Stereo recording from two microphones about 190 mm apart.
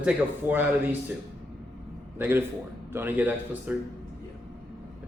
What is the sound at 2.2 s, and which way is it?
Speech, 10° right (ahead or behind).